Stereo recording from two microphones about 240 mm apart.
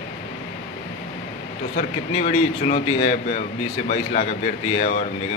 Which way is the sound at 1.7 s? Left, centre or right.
Left.